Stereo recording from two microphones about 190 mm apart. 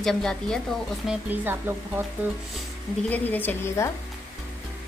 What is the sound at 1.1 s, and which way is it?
Speech, 10° right (ahead or behind).